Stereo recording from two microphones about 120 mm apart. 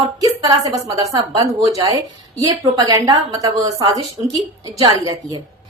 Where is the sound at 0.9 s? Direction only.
35° right (ahead or behind).